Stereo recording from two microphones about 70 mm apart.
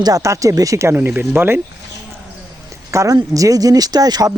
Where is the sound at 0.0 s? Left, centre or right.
Right.